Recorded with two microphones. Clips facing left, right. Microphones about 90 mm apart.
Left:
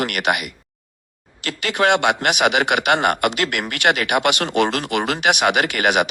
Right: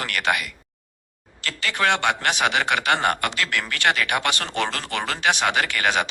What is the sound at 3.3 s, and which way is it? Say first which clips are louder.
Speech: left 3 dB; 60° left (ahead or behind).